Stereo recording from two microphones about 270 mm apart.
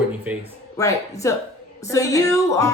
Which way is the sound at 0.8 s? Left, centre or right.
Centre.